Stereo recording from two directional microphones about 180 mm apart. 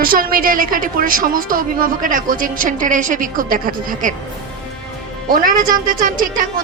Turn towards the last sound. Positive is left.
turn(degrees=-50)  # may be behind; listen again after turning